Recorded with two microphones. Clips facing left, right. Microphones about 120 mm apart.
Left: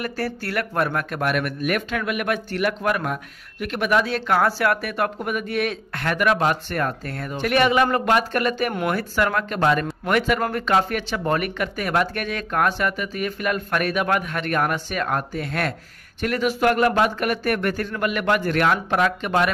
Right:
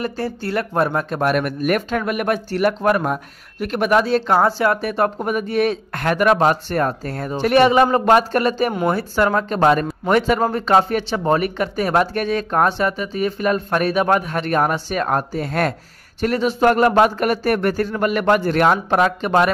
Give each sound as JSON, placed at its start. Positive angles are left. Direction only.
{"t": 0.0, "sound": "a man's voice", "side_deg": -25}
{"t": 4.4, "sound": "a man's voice", "side_deg": -20}